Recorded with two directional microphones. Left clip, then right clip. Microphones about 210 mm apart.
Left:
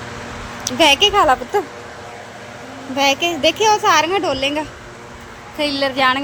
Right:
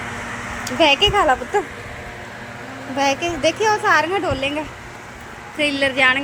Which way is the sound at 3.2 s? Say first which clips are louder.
Left 3 dB; 10° left (ahead or behind).